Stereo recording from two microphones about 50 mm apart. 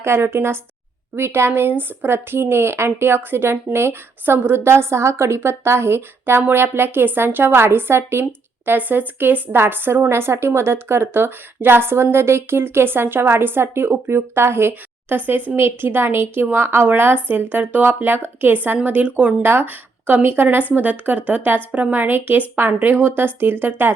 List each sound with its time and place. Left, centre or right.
0.0 s a woman's voice: right
14.7 s a woman's voice: right